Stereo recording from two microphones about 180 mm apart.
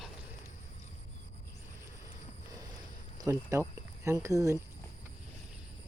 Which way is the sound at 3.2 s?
15° right (ahead or behind).